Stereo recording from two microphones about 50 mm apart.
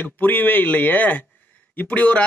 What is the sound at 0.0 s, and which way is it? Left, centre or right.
Speech, left.